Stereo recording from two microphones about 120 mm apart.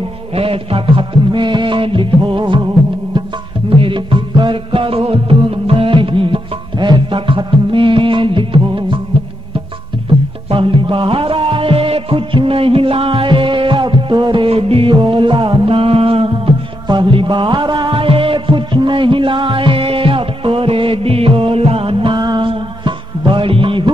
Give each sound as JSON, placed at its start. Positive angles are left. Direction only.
{"t": 0.3, "sound": "music", "side_deg": -50}
{"t": 3.7, "sound": "music", "side_deg": -45}
{"t": 10.5, "sound": "music", "side_deg": -45}